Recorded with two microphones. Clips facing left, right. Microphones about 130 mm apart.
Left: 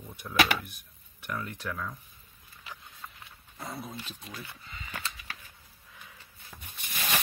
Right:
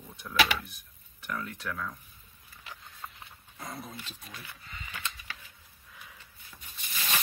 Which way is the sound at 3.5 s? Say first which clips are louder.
Left 2 dB; 5° left (ahead or behind).